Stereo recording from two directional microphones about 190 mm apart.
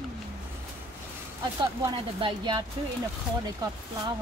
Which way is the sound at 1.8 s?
25° right (ahead or behind).